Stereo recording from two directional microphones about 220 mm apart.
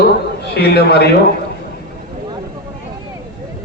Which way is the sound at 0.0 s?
50° left (ahead or behind).